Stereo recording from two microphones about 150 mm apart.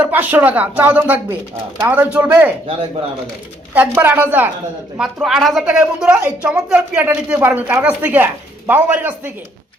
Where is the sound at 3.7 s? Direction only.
10° right (ahead or behind).